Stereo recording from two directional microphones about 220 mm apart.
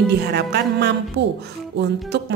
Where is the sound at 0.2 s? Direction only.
50° right (ahead or behind).